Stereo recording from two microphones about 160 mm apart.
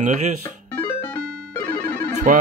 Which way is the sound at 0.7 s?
10° left (ahead or behind).